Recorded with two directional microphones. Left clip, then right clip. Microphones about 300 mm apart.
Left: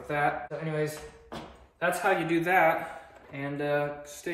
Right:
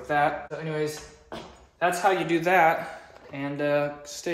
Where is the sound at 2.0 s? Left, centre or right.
Right.